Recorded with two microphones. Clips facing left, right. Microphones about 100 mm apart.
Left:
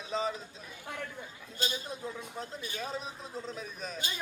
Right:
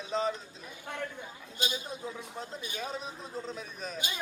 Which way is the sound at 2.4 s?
5° left (ahead or behind).